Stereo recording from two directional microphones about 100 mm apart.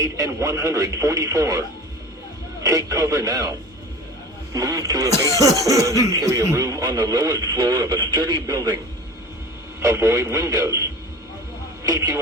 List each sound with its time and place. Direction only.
0.0 s speech: 30° right (ahead or behind)
2.6 s speech: 35° right (ahead or behind)
4.5 s speech: 35° right (ahead or behind)
9.8 s a man's voice: 30° right (ahead or behind)